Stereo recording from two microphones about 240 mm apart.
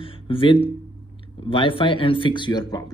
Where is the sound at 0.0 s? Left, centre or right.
Left.